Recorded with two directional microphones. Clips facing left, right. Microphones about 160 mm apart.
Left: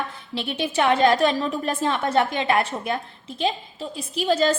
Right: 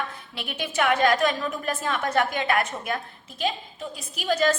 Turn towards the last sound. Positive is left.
turn(degrees=30)  # may be behind; listen again after turning